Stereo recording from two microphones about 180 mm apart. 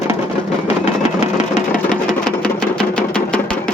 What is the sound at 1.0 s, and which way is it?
Vehicle, 40° left (ahead or behind).